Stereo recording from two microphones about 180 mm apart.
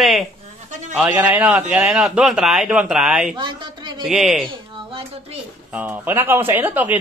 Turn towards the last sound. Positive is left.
turn(degrees=-10)  # may be behind; listen again after turning